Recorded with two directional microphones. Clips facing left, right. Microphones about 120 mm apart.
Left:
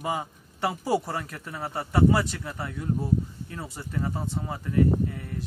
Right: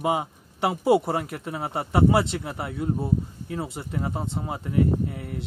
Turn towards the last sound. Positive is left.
turn(degrees=-20)  # may be behind; listen again after turning